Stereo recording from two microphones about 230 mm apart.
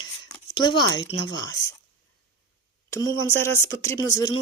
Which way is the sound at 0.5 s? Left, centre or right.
Centre.